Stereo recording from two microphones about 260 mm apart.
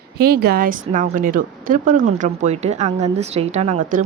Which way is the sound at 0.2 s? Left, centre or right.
Right.